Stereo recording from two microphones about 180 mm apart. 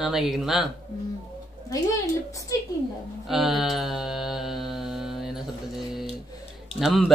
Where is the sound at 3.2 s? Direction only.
Centre (ahead or behind).